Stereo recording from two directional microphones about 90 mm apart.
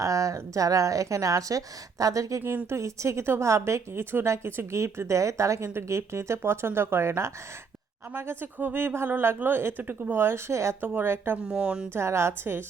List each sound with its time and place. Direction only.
0.0 s speech: 40° right (ahead or behind)
2.4 s speech: 25° right (ahead or behind)
11.4 s speech: 10° right (ahead or behind)
11.9 s speech: 30° right (ahead or behind)